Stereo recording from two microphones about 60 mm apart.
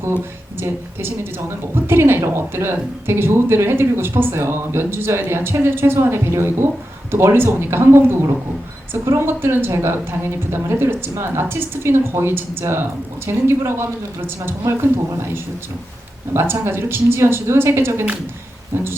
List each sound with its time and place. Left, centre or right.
0.6 s a woman's voice: right